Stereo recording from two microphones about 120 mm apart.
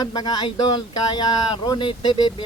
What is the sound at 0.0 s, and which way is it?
Speech, 35° left (ahead or behind).